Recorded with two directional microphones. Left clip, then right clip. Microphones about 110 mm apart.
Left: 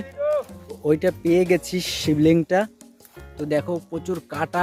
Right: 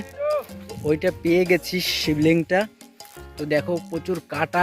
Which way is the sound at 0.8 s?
35° left (ahead or behind).